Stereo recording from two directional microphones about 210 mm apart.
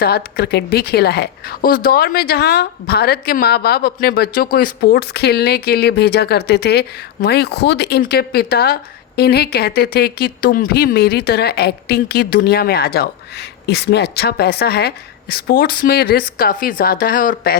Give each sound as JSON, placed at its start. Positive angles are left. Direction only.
{"t": 0.0, "sound": "speech", "side_deg": 50}